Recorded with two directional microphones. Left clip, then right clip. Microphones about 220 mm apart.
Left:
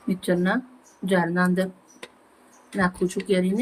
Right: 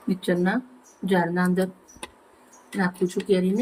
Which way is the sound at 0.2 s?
5° left (ahead or behind).